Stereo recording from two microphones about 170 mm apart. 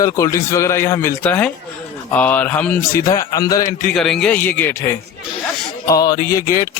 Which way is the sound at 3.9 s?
Centre (ahead or behind).